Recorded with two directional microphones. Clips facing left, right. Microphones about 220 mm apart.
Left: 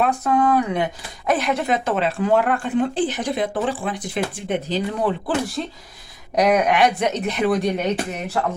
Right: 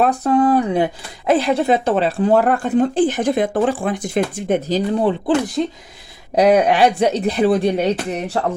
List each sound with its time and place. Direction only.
0.0 s speech: 35° right (ahead or behind)
4.9 s speech: 25° right (ahead or behind)
6.3 s speech: 30° right (ahead or behind)